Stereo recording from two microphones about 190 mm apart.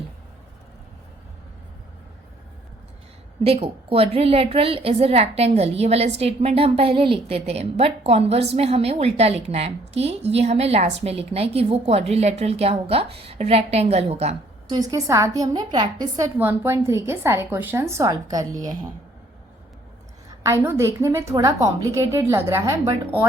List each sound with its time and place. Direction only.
3.4 s a woman's voice: 30° right (ahead or behind)
14.7 s a woman's voice: 20° right (ahead or behind)
20.4 s a woman's voice: 15° right (ahead or behind)